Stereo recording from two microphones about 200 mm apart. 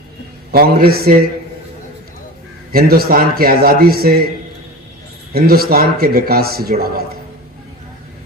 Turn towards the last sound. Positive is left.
turn(degrees=-50)  # may be behind; listen again after turning